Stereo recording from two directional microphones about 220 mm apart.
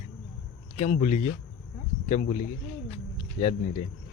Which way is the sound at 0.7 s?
30° left (ahead or behind).